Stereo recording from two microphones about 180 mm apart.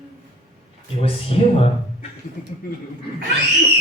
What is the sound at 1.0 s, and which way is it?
Speech, 30° left (ahead or behind).